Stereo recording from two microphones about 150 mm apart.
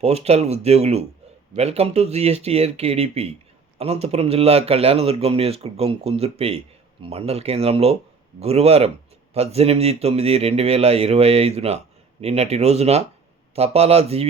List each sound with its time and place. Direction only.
0.0 s a man's voice: 45° right (ahead or behind)